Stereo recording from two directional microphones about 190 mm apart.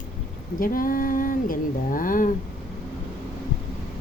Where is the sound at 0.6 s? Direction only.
45° left (ahead or behind).